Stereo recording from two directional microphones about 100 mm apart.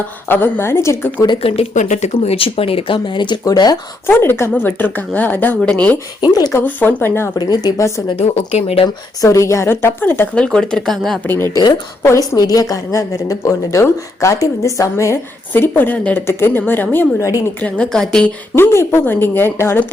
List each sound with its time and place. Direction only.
0.3 s a woman's voice: 20° left (ahead or behind)
1.4 s speech: 80° left; by 3.3 s 55° left (ahead or behind)
3.4 s speech: 40° left (ahead or behind)
4.0 s a woman's voice: 25° left (ahead or behind)
6.2 s speech: 40° left (ahead or behind)
6.5 s a woman's voice: 20° left (ahead or behind)
7.3 s speech: 40° left (ahead or behind)
8.1 s speech: 90° left
9.2 s a woman's voice: 30° left (ahead or behind)
10.3 s speech: 10° left (ahead or behind)
12.0 s a woman's voice: 30° left (ahead or behind)
17.2 s speech: 35° left (ahead or behind)
17.6 s speech: 10° left (ahead or behind)
18.5 s a woman's voice: 25° left (ahead or behind)